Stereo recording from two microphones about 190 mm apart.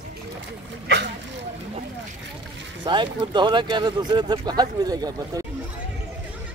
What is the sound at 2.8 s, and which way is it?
Speech, 25° right (ahead or behind).